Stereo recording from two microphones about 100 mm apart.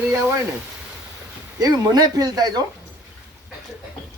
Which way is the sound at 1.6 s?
40° right (ahead or behind).